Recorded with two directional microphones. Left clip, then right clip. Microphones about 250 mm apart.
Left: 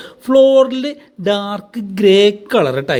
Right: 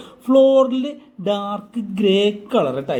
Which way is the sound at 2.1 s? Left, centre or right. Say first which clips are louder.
Left 7 dB; left.